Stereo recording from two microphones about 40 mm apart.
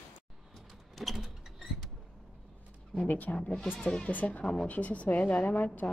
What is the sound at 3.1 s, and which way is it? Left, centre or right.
Speech, left.